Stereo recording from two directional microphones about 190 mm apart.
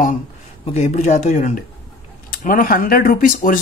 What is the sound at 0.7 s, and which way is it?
Speech, 35° left (ahead or behind).